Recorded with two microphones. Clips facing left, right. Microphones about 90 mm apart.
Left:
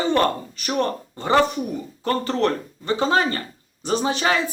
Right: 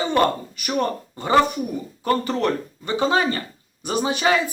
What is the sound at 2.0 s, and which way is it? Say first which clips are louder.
Speech: even; 15° right (ahead or behind).